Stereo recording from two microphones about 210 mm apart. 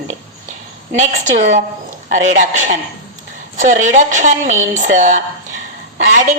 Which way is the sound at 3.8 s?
35° right (ahead or behind).